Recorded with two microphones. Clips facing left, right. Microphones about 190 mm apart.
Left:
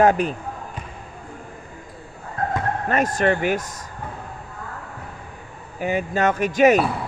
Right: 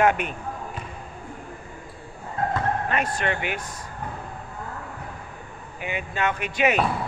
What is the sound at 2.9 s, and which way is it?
Speech, 45° left (ahead or behind).